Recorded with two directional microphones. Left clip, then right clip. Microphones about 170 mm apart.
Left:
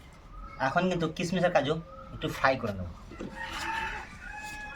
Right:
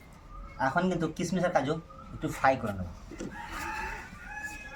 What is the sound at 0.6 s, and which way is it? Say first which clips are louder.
Speech: left 1 dB; 35° left (ahead or behind).